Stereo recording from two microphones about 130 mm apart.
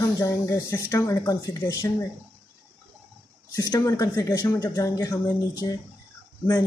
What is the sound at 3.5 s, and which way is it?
Speech, 25° left (ahead or behind).